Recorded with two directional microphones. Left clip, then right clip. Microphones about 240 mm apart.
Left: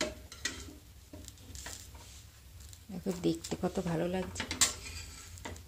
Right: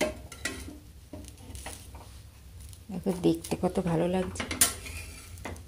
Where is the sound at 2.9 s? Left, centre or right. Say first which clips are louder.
Right 6 dB; centre.